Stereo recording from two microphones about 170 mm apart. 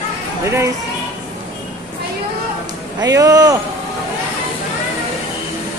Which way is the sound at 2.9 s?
20° right (ahead or behind).